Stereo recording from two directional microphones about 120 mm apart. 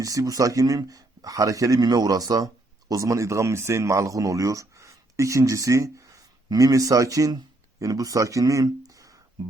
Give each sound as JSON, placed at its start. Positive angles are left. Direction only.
{"t": 0.0, "sound": "speech", "side_deg": -30}